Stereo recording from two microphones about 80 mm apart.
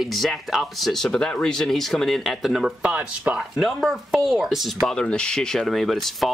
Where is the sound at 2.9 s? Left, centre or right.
Centre.